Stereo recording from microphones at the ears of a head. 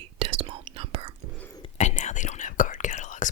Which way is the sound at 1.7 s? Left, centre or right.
Left.